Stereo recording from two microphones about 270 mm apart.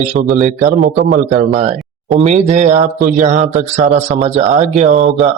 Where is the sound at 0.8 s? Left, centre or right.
Right.